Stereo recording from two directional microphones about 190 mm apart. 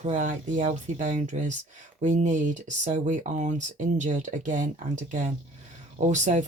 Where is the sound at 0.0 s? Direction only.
45° right (ahead or behind).